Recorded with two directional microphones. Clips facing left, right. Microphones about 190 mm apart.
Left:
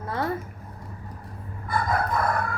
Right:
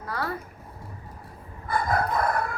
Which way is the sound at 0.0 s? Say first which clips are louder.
Left 3 dB; 25° left (ahead or behind).